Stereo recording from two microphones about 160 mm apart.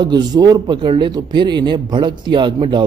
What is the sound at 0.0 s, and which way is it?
Speech, 25° right (ahead or behind).